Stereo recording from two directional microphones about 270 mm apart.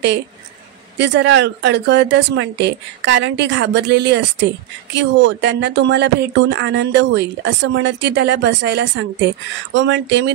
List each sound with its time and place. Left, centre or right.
0.9 s speech: right